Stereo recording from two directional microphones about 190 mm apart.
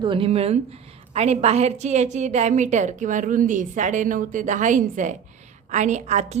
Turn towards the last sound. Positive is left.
turn(degrees=-40)  # may be behind; listen again after turning